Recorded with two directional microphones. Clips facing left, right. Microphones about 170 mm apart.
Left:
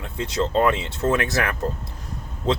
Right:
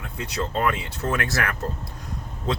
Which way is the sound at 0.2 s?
25° left (ahead or behind).